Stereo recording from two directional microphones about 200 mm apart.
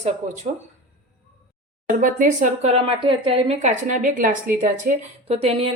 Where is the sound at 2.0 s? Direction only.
40° right (ahead or behind).